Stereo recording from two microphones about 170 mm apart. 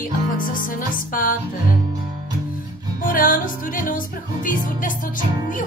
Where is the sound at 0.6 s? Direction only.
55° left (ahead or behind).